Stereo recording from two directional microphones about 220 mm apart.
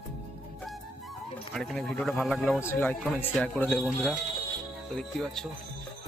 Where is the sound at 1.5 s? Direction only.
Centre (ahead or behind).